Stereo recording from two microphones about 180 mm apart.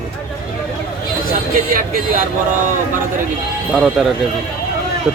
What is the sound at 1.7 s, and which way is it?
Speech, 50° right (ahead or behind).